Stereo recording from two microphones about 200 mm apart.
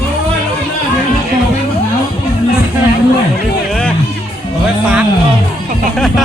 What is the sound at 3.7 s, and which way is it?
Music, 5° left (ahead or behind).